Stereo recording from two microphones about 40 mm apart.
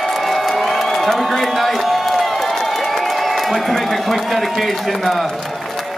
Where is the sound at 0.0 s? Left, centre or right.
Centre.